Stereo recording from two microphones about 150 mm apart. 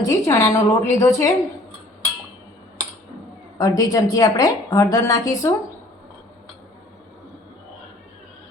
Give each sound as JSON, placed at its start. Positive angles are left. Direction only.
{"t": 0.0, "sound": "a woman's voice", "side_deg": 20}
{"t": 3.6, "sound": "a woman's voice", "side_deg": 25}